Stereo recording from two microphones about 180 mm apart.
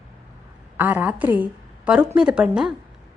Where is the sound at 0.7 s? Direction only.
10° right (ahead or behind).